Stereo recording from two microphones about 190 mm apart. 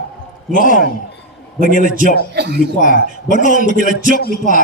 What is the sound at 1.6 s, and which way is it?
Speech, 45° right (ahead or behind).